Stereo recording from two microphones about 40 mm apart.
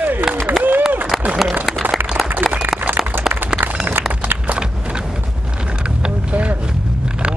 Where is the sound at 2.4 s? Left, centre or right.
Centre.